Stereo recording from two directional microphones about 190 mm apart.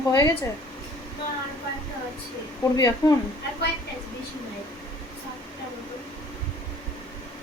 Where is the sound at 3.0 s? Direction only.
20° left (ahead or behind).